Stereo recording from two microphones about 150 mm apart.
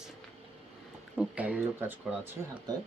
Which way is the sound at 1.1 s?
10° right (ahead or behind).